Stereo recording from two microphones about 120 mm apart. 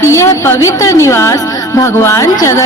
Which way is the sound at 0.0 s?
25° left (ahead or behind).